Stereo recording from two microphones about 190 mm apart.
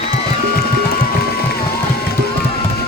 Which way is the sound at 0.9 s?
55° left (ahead or behind).